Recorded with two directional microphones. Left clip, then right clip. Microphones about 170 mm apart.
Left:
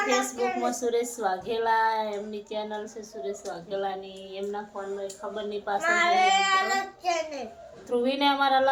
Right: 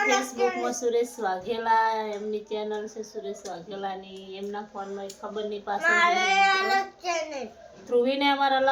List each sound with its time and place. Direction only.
0.6 s a woman's voice: 25° left (ahead or behind)
5.3 s speech: 20° left (ahead or behind)
5.8 s a child's voice: 25° right (ahead or behind)
7.9 s speech: 20° left (ahead or behind)